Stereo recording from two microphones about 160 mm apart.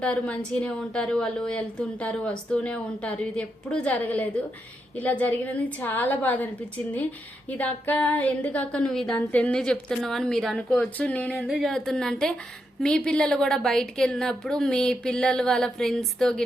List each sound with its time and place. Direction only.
0.0 s a woman's voice: 10° left (ahead or behind)
7.6 s a woman's voice: 10° left (ahead or behind)